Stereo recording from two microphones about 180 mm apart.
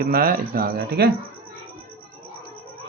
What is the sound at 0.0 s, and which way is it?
Speech, 55° right (ahead or behind).